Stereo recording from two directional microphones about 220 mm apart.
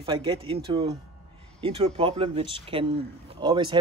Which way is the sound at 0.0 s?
25° right (ahead or behind).